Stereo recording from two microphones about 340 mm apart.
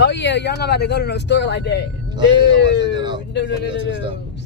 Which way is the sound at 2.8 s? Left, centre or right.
Centre.